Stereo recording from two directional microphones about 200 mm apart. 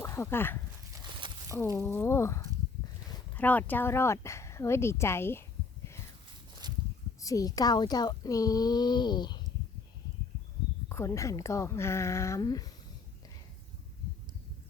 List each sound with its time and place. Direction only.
0.0 s speech: 15° left (ahead or behind)
1.0 s a sound: 25° right (ahead or behind)
1.8 s a woman's voice: 10° left (ahead or behind)
6.6 s a sound: 20° right (ahead or behind)
7.2 s a woman's voice: 15° left (ahead or behind)
10.8 s a woman's voice: 15° left (ahead or behind)